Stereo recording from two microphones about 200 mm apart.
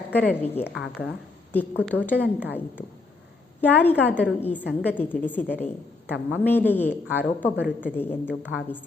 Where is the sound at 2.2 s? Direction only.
10° right (ahead or behind).